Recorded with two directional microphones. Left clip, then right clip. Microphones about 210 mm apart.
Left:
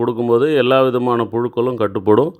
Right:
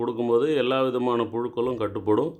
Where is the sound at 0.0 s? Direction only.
30° left (ahead or behind).